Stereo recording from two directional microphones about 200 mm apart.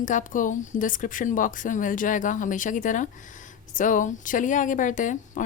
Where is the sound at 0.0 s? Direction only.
40° left (ahead or behind).